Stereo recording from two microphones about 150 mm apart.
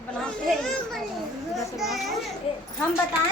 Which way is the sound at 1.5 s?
Centre (ahead or behind).